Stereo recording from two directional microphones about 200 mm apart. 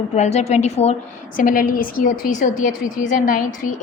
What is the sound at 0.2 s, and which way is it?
Speech, 35° left (ahead or behind).